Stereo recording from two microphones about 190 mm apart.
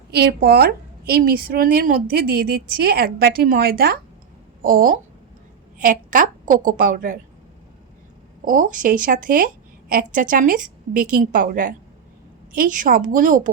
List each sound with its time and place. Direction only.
0.1 s a woman's voice: 55° right (ahead or behind)
8.4 s a woman's voice: 45° right (ahead or behind)